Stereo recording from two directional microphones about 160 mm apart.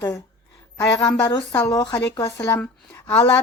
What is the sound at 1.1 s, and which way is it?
A woman's voice, 20° left (ahead or behind).